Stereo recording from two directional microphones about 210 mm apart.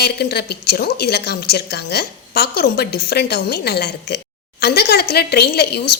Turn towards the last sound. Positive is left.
turn(degrees=50)  # may be behind; listen again after turning